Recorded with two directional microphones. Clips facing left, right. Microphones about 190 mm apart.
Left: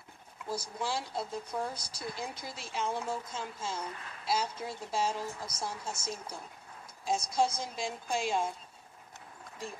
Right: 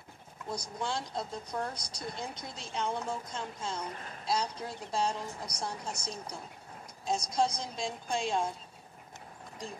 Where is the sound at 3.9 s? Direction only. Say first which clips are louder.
Right 2 dB; 35° right (ahead or behind).